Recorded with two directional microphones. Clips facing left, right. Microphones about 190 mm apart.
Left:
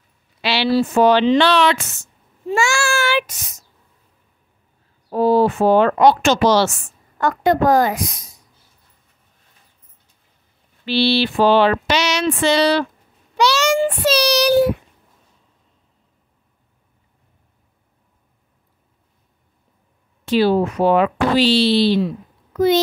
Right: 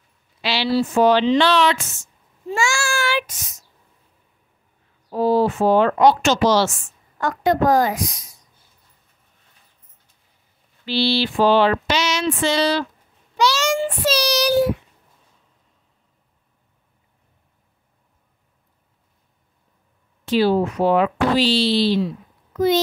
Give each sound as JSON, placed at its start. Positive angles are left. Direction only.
{"t": 0.4, "sound": "speech", "side_deg": 65}
{"t": 5.1, "sound": "speech", "side_deg": 60}
{"t": 10.9, "sound": "a sound", "side_deg": 65}
{"t": 13.4, "sound": "child singing", "side_deg": 70}
{"t": 20.2, "sound": "speech", "side_deg": 65}